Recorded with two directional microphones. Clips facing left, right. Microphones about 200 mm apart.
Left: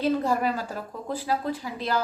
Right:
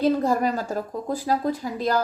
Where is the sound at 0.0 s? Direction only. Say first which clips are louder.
Right 3 dB; 45° right (ahead or behind).